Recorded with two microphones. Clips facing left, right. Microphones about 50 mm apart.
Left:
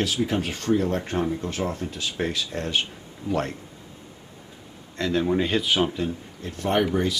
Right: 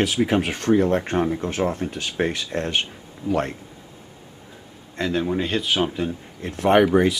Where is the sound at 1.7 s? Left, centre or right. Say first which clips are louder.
Right 4 dB; right.